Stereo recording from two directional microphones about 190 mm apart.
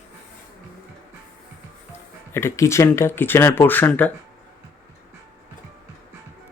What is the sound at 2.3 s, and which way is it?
Speech, 15° left (ahead or behind).